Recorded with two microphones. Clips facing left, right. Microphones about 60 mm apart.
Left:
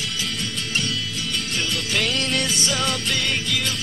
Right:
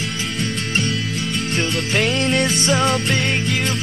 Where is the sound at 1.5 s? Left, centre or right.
Right.